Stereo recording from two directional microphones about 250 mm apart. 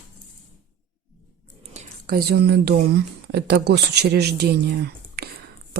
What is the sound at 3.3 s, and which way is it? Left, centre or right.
Speech, right.